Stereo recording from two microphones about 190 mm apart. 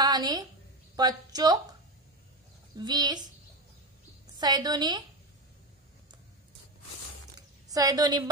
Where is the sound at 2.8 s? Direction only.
20° right (ahead or behind).